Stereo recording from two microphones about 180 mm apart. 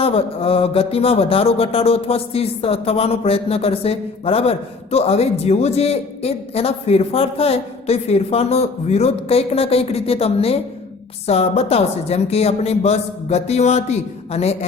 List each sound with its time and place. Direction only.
0.0 s speech: 30° left (ahead or behind)